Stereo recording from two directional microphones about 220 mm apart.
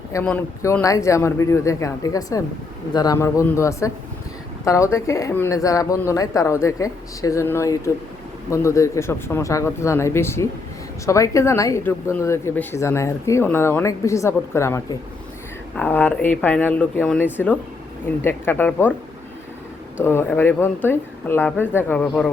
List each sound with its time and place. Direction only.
0.1 s speech: 10° left (ahead or behind)
20.1 s speech: 10° left (ahead or behind)